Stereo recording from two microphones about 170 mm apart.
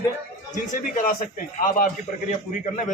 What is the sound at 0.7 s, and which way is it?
Speech, 50° left (ahead or behind).